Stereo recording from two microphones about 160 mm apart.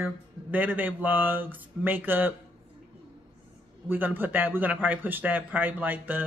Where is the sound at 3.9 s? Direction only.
10° right (ahead or behind).